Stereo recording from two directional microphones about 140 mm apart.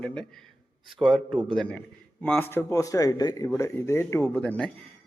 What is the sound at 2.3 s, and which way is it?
A man's voice, 15° left (ahead or behind).